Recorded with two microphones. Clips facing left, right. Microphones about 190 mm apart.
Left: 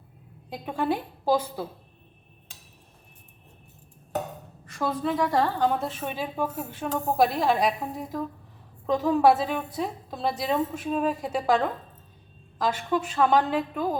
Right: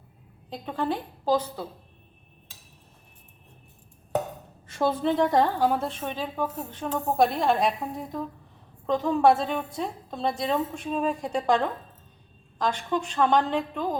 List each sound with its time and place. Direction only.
0.5 s a woman's voice: 10° left (ahead or behind)
4.6 s a woman's voice: 25° right (ahead or behind)
5.5 s a woman's voice: 5° right (ahead or behind)